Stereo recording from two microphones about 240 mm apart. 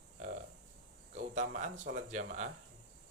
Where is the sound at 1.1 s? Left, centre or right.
Right.